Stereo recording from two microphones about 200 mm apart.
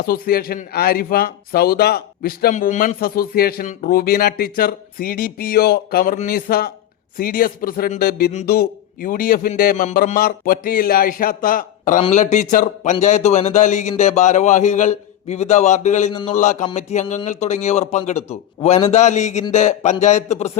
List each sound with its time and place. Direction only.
0.0 s a man's voice: 50° left (ahead or behind)